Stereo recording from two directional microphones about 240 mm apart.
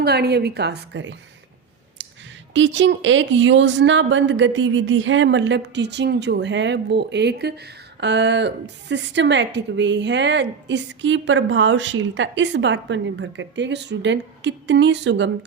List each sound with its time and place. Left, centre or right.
0.0 s a woman's voice: right
2.0 s a sound: right
2.5 s a woman's voice: right